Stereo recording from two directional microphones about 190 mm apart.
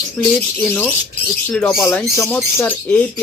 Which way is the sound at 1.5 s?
Centre (ahead or behind).